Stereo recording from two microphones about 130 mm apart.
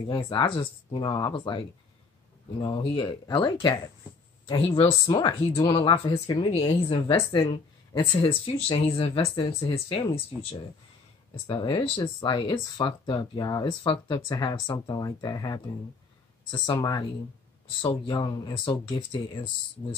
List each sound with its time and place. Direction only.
0.0 s speech: 40° left (ahead or behind)
2.6 s speech: 35° left (ahead or behind)
11.4 s speech: 35° left (ahead or behind)
16.7 s speech: 30° left (ahead or behind)